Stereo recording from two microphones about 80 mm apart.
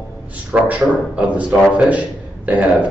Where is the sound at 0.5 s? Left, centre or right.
Centre.